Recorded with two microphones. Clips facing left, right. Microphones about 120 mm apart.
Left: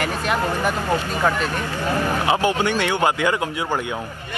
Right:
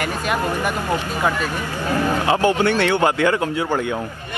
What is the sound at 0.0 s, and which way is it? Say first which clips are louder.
Speech: even; 5° right (ahead or behind).